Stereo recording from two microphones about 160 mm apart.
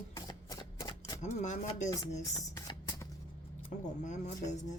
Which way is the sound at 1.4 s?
50° left (ahead or behind).